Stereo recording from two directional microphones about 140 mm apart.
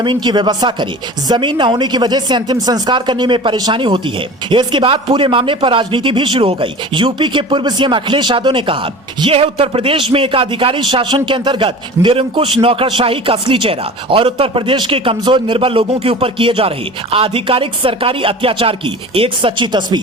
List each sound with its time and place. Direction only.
0.0 s speech: 35° right (ahead or behind)